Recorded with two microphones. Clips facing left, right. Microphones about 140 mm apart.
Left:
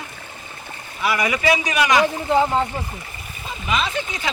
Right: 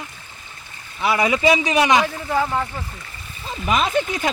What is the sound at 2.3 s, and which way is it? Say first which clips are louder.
Speech: left 3 dB; 25° left (ahead or behind).